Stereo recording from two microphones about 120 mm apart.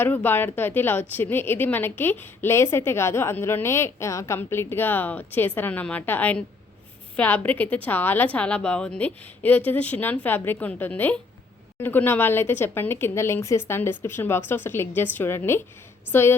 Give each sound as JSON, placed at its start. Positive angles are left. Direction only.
{"t": 0.0, "sound": "a woman's voice", "side_deg": 15}